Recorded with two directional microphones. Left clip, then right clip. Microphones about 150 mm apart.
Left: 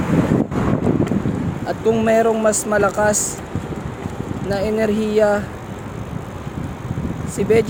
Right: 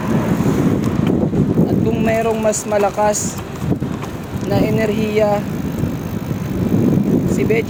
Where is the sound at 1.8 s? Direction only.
35° left (ahead or behind).